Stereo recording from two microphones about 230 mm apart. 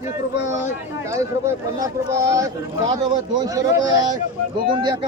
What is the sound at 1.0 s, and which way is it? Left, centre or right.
Speech, centre.